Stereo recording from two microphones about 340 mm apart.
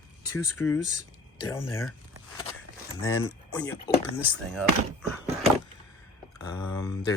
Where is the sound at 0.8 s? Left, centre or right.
Left.